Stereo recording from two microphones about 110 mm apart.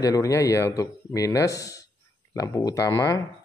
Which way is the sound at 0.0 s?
30° left (ahead or behind).